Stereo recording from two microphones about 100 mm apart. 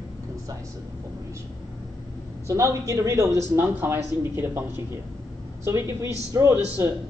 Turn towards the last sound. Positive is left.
turn(degrees=-30)  # may be behind; listen again after turning